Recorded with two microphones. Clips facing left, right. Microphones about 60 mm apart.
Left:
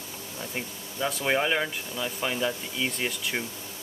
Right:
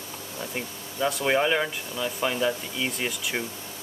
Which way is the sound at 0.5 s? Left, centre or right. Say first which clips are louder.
Right 1 dB; centre.